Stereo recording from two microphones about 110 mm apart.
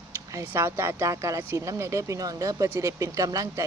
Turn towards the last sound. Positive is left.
turn(degrees=-30)  # may be behind; listen again after turning